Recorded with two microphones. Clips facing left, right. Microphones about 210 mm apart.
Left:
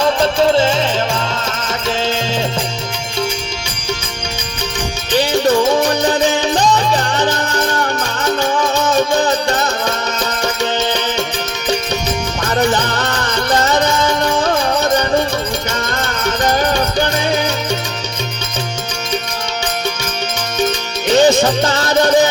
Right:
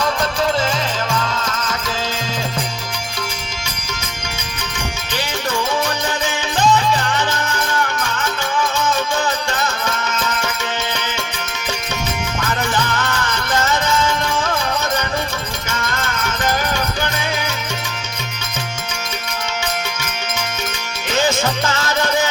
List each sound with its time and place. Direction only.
0.0 s music: 30° left (ahead or behind)
5.1 s music: 35° left (ahead or behind)
12.5 s music: 35° left (ahead or behind)
15.8 s music: 35° left (ahead or behind)
21.1 s music: 35° left (ahead or behind)